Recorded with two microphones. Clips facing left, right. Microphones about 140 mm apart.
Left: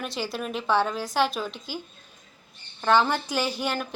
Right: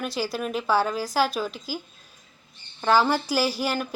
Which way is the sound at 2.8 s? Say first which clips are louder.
Right 1 dB; 5° right (ahead or behind).